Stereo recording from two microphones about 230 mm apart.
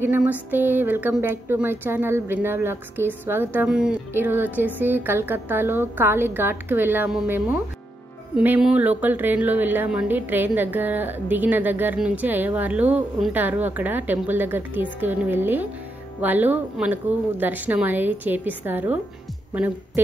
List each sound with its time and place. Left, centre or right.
0.0 s a woman's voice: centre